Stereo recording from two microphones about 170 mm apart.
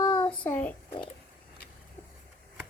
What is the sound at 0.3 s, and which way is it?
Child singing, 10° left (ahead or behind).